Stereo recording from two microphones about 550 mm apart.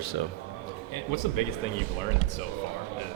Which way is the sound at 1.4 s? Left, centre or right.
Left.